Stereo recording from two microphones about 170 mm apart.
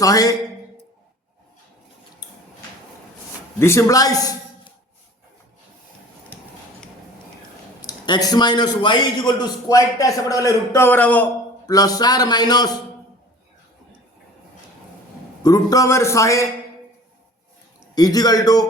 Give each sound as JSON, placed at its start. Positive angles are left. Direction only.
{"t": 0.0, "sound": "a man's voice", "side_deg": 20}
{"t": 3.6, "sound": "a man's voice", "side_deg": 15}
{"t": 7.8, "sound": "a man's voice", "side_deg": 25}
{"t": 11.7, "sound": "a man's voice", "side_deg": 20}
{"t": 15.4, "sound": "a man's voice", "side_deg": 20}
{"t": 17.9, "sound": "a man's voice", "side_deg": 20}